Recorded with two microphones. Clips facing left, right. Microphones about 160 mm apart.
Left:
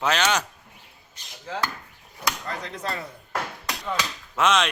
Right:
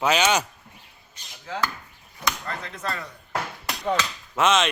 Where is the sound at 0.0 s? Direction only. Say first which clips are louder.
Right 2 dB; 5° right (ahead or behind).